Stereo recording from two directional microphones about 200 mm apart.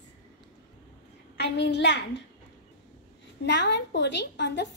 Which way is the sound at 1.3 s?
60° left (ahead or behind).